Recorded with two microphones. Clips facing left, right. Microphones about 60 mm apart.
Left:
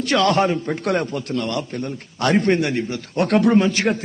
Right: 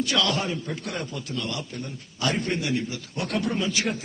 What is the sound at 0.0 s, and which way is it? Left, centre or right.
A man's voice, left.